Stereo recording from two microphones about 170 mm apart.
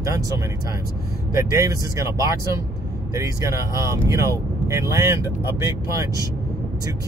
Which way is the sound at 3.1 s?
20° right (ahead or behind).